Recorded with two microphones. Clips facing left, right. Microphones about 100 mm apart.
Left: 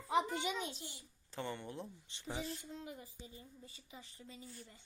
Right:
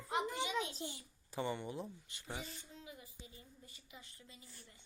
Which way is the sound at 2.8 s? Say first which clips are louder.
Left 5 dB; 50° left (ahead or behind).